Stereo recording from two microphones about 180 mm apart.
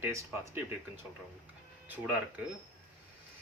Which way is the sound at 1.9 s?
10° right (ahead or behind).